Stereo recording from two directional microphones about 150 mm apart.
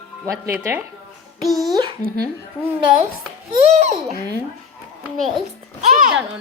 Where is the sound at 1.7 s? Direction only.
25° right (ahead or behind).